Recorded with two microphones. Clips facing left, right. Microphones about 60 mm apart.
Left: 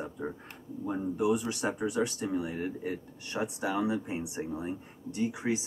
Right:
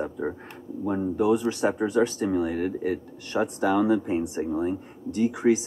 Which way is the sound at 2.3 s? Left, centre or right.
Right.